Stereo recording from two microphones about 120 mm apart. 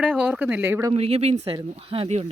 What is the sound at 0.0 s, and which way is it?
Speech, 10° right (ahead or behind).